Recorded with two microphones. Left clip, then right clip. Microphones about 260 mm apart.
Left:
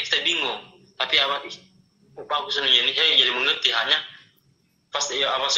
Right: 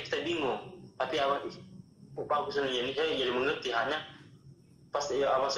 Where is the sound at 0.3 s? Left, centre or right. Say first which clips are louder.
Left 8 dB; centre.